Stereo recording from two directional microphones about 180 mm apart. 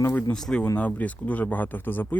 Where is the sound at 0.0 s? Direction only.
10° left (ahead or behind).